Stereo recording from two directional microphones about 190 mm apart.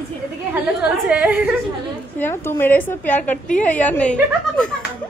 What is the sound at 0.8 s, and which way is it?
Speech, 5° right (ahead or behind).